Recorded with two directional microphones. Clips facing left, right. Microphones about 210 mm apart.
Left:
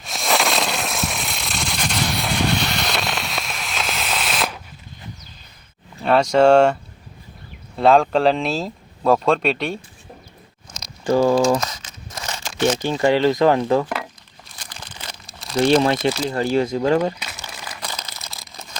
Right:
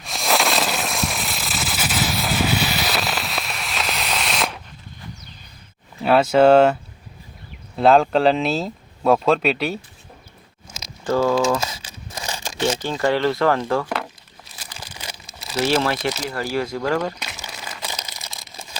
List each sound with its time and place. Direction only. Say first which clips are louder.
0.0 s fireworks: even; centre (ahead or behind)
6.0 s speech: even; 5° right (ahead or behind)
7.8 s speech: even; centre (ahead or behind)
11.0 s speech: left 3 dB; 15° left (ahead or behind)
11.6 s crumpling: even; 10° right (ahead or behind)
12.1 s a sound: right 1 dB; 10° right (ahead or behind)
12.8 s speech: left 3 dB; 15° left (ahead or behind)
14.4 s crumpling: even; 5° right (ahead or behind)
15.8 s speech: left 4 dB; 20° left (ahead or behind)
17.4 s crumpling: even; 10° right (ahead or behind)